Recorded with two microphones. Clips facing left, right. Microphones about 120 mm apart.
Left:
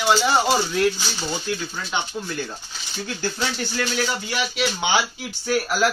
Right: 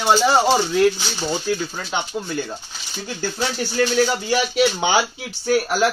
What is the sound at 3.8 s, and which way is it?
Speech, 40° right (ahead or behind).